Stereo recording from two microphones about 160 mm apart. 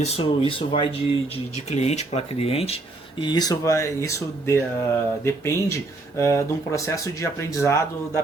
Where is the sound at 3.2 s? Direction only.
25° left (ahead or behind).